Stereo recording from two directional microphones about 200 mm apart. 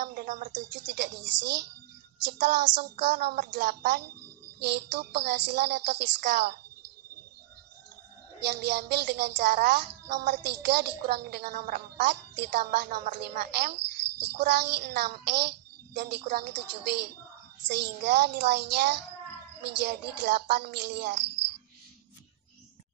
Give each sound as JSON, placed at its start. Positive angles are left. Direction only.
{"t": 0.0, "sound": "a sound", "side_deg": -40}
{"t": 0.5, "sound": "a woman's voice", "side_deg": -65}
{"t": 2.3, "sound": "a woman's voice", "side_deg": -60}
{"t": 8.5, "sound": "a woman's voice", "side_deg": -55}